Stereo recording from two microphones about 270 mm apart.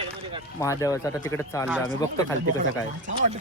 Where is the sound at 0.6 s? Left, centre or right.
Centre.